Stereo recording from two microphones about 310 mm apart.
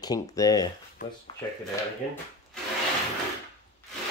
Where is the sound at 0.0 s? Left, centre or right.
Centre.